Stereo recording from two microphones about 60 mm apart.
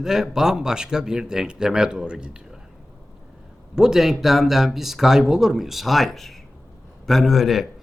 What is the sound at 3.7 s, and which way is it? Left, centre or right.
Speech, centre.